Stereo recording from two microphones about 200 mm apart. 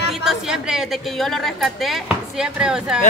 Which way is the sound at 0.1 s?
Centre (ahead or behind).